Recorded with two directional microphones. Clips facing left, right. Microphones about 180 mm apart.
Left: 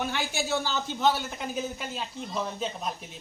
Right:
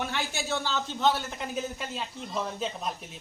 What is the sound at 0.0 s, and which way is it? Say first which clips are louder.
Speech: left 2 dB; centre (ahead or behind).